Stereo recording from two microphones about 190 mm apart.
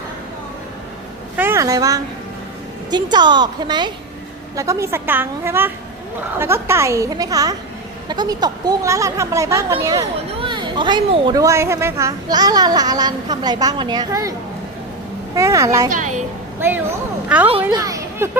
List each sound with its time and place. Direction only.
1.4 s a woman's voice: 15° right (ahead or behind)
15.4 s a woman's voice: 15° right (ahead or behind)
15.9 s a woman's voice: 40° right (ahead or behind)
16.6 s a woman's voice: 10° right (ahead or behind)